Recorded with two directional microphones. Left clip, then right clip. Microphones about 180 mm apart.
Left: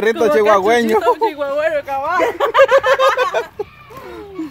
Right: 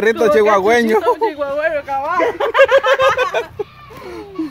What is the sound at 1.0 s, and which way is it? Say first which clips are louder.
Speech: left 1 dB; 45° left (ahead or behind).